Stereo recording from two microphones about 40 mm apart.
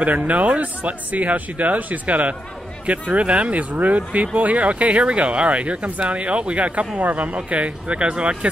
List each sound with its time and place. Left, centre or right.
0.0 s speech: right